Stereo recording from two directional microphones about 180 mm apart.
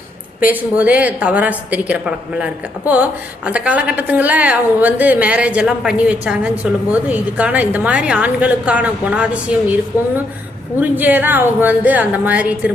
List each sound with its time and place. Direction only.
0.4 s a woman's voice: 10° right (ahead or behind)
9.9 s speech: 15° left (ahead or behind)
10.8 s a woman's voice: 10° right (ahead or behind)